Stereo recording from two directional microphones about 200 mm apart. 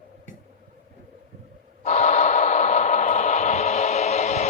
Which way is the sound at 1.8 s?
35° left (ahead or behind).